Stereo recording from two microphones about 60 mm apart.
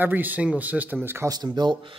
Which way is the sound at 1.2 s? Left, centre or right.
Right.